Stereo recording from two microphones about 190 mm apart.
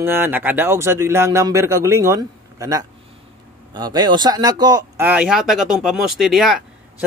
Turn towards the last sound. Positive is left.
turn(degrees=0)  # may be behind; listen again after turning